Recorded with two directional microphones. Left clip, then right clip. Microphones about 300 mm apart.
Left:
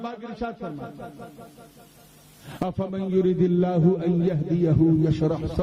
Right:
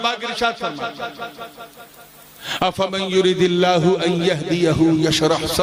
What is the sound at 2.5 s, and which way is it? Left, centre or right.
A man's voice, centre.